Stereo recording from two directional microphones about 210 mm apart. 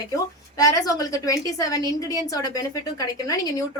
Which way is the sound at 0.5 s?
15° left (ahead or behind).